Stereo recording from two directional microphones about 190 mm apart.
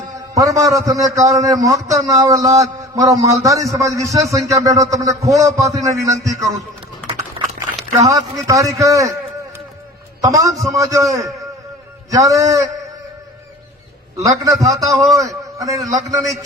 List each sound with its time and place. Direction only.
0.2 s a man's voice: 15° right (ahead or behind)
7.9 s a man's voice: 20° right (ahead or behind)
10.2 s a man's voice: 15° right (ahead or behind)
14.2 s a man's voice: 15° right (ahead or behind)